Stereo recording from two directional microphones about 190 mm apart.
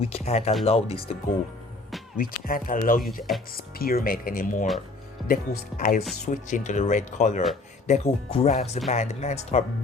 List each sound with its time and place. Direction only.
0.0 s speech: 35° left (ahead or behind)
2.1 s speech: 50° left (ahead or behind)